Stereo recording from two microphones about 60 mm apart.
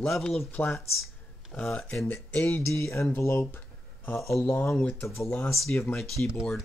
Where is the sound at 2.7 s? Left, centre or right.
Left.